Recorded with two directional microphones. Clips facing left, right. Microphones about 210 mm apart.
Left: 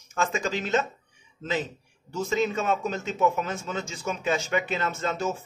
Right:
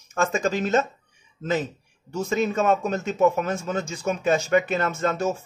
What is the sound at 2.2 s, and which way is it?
A man's voice, 45° right (ahead or behind).